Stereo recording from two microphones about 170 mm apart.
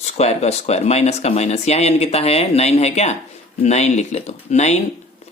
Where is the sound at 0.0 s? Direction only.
40° left (ahead or behind).